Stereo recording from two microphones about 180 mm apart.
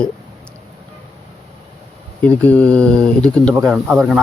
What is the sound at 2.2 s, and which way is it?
Speech, 10° left (ahead or behind).